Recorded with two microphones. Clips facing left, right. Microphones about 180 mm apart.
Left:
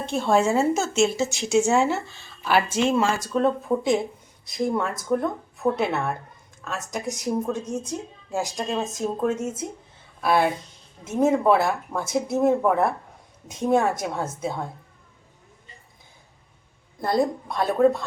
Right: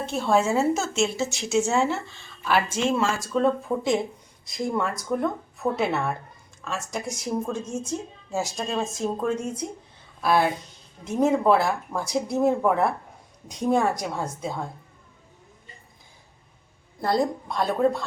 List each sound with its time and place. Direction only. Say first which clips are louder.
0.0 s speech: left 2 dB; centre (ahead or behind)
8.7 s speech: even; centre (ahead or behind)
17.0 s speech: left 1 dB; centre (ahead or behind)